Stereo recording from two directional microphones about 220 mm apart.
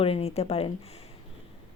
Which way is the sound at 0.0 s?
25° left (ahead or behind).